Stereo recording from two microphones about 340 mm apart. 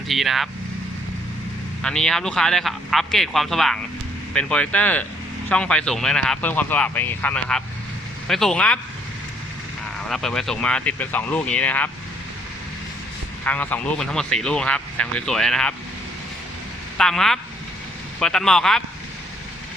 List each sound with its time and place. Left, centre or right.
0.1 s speech: centre
1.8 s speech: centre
10.1 s speech: centre
13.4 s speech: centre
17.0 s speech: centre